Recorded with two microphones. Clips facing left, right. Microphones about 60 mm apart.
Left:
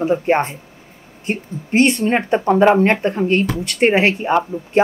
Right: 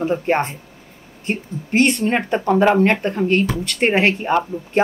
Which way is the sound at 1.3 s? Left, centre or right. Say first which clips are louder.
Left 1 dB; left.